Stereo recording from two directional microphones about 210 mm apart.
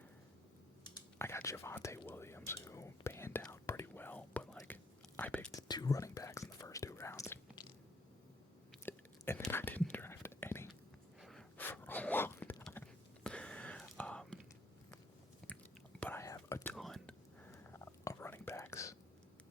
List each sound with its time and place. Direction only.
1.2 s whispering: 10° left (ahead or behind)
5.5 s whispering: 20° left (ahead or behind)
8.8 s whispering: 10° left (ahead or behind)
11.2 s a sound: centre (ahead or behind)
15.4 s chewing: 5° left (ahead or behind)
16.0 s whispering: 10° left (ahead or behind)
16.7 s whispering: centre (ahead or behind)